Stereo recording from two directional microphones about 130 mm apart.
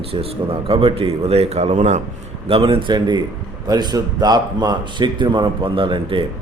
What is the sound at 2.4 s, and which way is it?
Speech, 45° right (ahead or behind).